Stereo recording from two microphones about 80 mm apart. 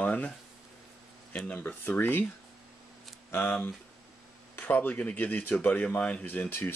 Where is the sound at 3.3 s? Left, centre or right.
Left.